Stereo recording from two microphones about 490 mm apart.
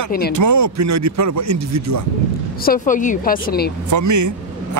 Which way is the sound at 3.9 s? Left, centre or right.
Right.